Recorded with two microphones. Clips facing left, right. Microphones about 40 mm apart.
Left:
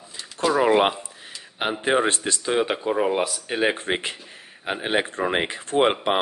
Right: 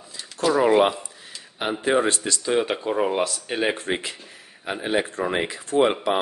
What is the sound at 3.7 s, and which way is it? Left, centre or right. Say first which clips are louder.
Speech: left 1 dB; left.